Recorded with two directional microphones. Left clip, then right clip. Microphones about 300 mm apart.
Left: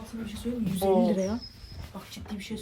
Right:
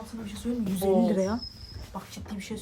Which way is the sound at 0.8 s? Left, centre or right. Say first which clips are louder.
Even; centre.